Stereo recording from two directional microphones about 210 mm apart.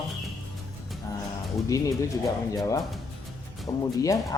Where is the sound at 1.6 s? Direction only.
15° left (ahead or behind).